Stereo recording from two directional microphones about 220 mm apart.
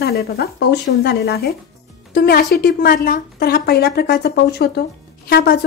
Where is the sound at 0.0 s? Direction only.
45° left (ahead or behind).